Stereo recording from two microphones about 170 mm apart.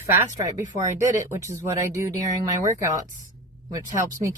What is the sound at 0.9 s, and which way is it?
Speech, 45° right (ahead or behind).